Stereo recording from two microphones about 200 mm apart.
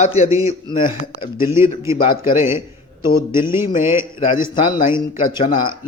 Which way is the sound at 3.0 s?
25° left (ahead or behind).